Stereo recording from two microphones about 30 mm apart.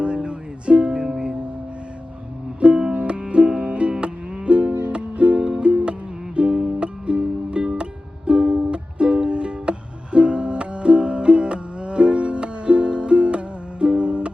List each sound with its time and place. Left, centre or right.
0.0 s music: right
1.0 s music: right
2.9 s music: right
6.5 s music: right
6.7 s music: right